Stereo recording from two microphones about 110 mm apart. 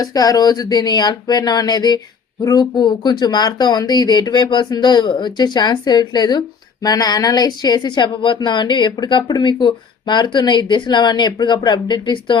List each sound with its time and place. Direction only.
0.0 s a woman's voice: 35° left (ahead or behind)